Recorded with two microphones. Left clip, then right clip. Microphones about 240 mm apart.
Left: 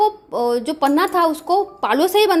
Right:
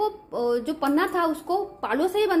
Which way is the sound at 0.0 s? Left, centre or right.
Left.